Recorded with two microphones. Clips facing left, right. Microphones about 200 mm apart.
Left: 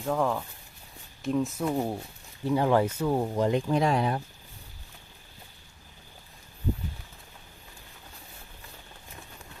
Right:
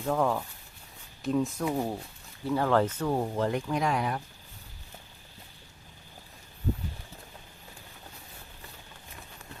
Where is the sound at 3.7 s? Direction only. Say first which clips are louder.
Left 4 dB; 30° left (ahead or behind).